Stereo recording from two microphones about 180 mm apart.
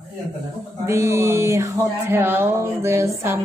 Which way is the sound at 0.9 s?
15° right (ahead or behind).